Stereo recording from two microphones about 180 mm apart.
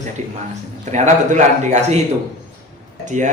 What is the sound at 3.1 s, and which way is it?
Speech, 45° right (ahead or behind).